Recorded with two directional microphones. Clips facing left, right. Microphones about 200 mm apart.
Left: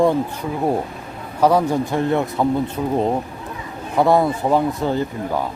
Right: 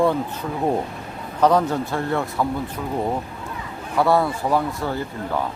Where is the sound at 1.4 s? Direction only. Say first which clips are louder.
Left 2 dB; 10° left (ahead or behind).